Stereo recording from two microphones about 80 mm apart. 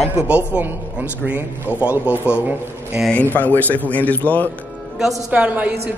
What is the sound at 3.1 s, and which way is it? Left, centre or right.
A man's voice, left.